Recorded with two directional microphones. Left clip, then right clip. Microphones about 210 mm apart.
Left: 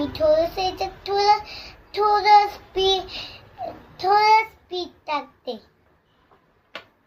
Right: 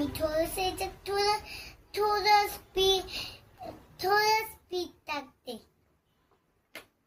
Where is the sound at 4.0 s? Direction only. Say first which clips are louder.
Left 10 dB; 20° right (ahead or behind).